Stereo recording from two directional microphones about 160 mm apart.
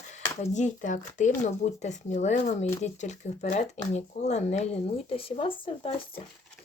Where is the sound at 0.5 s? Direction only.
50° left (ahead or behind); by 6.2 s 35° left (ahead or behind).